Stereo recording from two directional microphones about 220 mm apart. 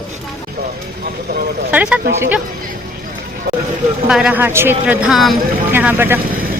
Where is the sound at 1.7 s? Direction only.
5° right (ahead or behind).